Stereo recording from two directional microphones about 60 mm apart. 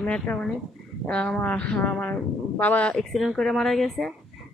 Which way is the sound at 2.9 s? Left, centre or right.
Centre.